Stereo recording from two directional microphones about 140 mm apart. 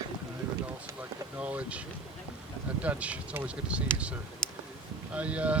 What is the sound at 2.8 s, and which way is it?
Speech, 10° right (ahead or behind).